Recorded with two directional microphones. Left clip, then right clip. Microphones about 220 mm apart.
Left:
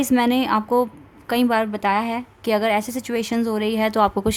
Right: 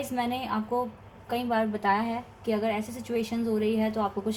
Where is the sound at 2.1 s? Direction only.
45° left (ahead or behind).